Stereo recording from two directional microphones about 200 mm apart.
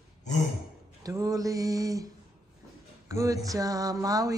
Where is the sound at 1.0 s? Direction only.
15° right (ahead or behind).